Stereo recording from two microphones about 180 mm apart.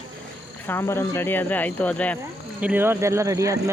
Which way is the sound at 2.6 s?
10° right (ahead or behind).